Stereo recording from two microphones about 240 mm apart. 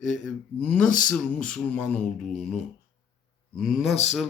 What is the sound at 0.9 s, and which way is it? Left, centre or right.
Speech, left.